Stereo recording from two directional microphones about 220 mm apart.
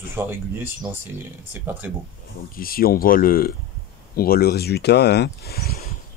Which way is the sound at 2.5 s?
40° left (ahead or behind).